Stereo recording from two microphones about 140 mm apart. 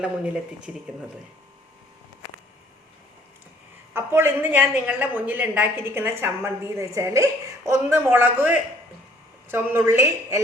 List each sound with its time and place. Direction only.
0.0 s a woman's voice: 5° right (ahead or behind)
3.9 s a woman's voice: 15° right (ahead or behind)